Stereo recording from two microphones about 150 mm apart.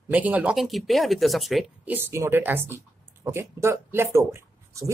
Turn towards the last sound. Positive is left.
turn(degrees=-20)  # may be behind; listen again after turning